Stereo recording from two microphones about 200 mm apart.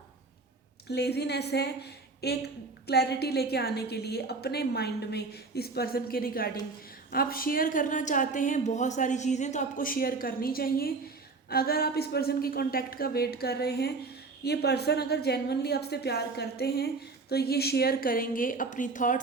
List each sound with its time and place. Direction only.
0.9 s a woman's voice: 55° left (ahead or behind); by 19.2 s 40° left (ahead or behind)